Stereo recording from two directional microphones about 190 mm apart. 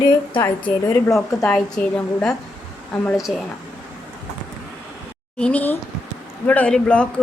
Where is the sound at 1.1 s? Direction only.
5° left (ahead or behind).